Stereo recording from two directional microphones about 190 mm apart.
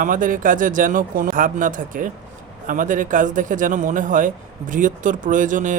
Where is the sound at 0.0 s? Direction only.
45° right (ahead or behind).